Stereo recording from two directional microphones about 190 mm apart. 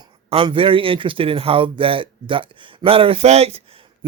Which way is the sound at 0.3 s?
30° right (ahead or behind).